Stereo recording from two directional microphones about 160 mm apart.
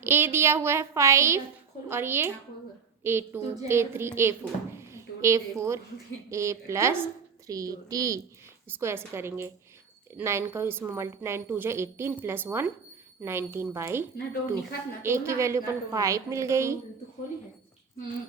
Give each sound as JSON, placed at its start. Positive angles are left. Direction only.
{"t": 0.0, "sound": "a woman's voice", "side_deg": -15}
{"t": 15.0, "sound": "a woman's voice", "side_deg": -15}